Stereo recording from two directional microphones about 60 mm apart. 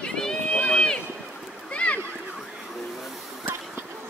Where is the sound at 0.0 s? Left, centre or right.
Centre.